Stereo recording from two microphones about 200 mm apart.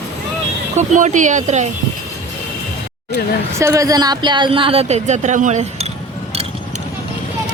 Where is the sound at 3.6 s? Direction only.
15° right (ahead or behind); by 5.9 s 35° right (ahead or behind).